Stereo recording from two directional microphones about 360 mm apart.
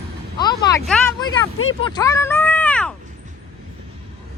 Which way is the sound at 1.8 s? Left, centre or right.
Centre.